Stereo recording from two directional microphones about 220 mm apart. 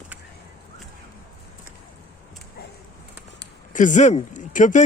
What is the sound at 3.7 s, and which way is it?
Speech, 35° left (ahead or behind).